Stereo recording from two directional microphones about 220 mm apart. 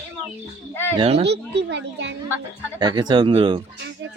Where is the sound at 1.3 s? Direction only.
50° right (ahead or behind).